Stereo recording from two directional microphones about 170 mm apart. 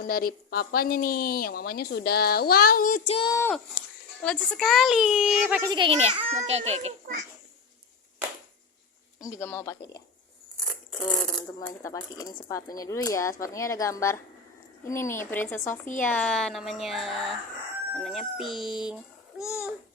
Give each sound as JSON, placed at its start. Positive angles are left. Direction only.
{"t": 0.0, "sound": "a woman's voice", "side_deg": 60}
{"t": 3.1, "sound": "speech", "side_deg": 30}
{"t": 3.5, "sound": "a child's voice", "side_deg": 5}
{"t": 5.6, "sound": "a child's voice", "side_deg": -30}
{"t": 9.2, "sound": "speech", "side_deg": 15}
{"t": 11.1, "sound": "a child's voice", "side_deg": 5}
{"t": 11.8, "sound": "speech", "side_deg": 20}
{"t": 15.9, "sound": "speech", "side_deg": 50}
{"t": 16.1, "sound": "a child's voice", "side_deg": 5}